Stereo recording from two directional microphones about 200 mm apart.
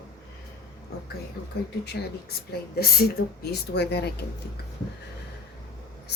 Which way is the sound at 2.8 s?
50° left (ahead or behind).